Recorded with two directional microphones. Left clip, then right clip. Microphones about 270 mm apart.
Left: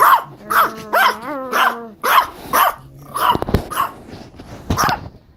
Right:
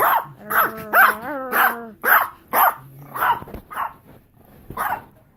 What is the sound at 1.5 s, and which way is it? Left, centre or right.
Dog, centre.